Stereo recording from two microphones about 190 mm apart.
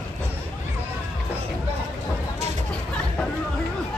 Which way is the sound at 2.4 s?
35° right (ahead or behind).